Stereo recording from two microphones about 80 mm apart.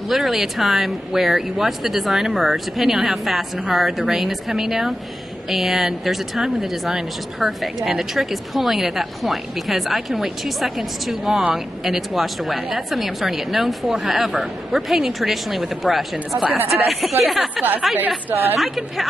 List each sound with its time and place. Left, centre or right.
0.1 s speech: centre
17.6 s speech: right
18.3 s a woman's voice: right
18.6 s speech: centre